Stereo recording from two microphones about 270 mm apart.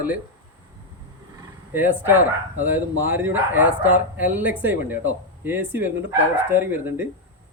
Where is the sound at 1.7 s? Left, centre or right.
Centre.